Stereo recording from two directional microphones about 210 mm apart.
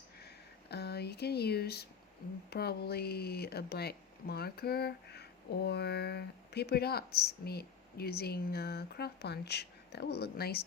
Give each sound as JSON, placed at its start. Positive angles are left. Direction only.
{"t": 0.7, "sound": "speech", "side_deg": 50}